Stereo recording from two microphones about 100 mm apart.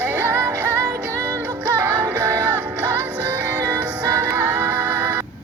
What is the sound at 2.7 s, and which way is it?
Music, 20° right (ahead or behind).